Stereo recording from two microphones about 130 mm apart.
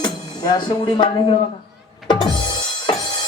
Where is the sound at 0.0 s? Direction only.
35° left (ahead or behind).